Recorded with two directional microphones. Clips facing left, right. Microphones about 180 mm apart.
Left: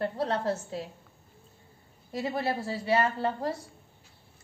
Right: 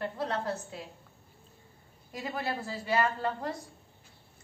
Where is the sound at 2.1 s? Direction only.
30° left (ahead or behind).